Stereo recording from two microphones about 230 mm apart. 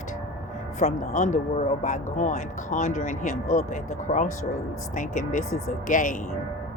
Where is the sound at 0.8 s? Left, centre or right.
Left.